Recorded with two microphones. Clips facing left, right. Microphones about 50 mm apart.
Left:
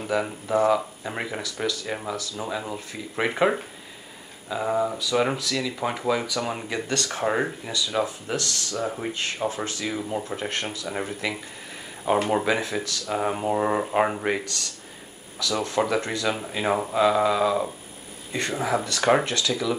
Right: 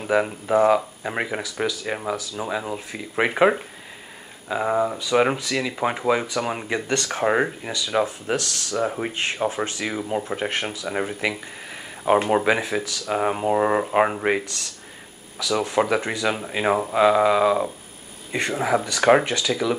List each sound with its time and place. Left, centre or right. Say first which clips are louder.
0.0 s speech: right 4 dB; right